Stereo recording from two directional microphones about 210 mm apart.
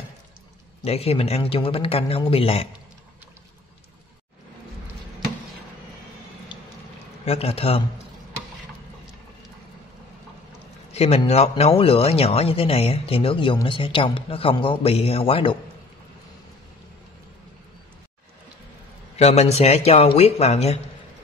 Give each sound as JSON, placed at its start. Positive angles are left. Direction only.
{"t": 0.8, "sound": "speech", "side_deg": 30}
{"t": 7.2, "sound": "speech", "side_deg": 30}
{"t": 10.9, "sound": "speech", "side_deg": 30}
{"t": 19.1, "sound": "speech", "side_deg": 30}